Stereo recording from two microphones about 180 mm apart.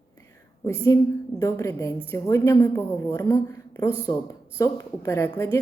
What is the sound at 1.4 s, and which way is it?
A woman's voice, 15° left (ahead or behind).